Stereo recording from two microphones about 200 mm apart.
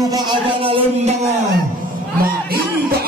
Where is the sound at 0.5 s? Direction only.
25° right (ahead or behind).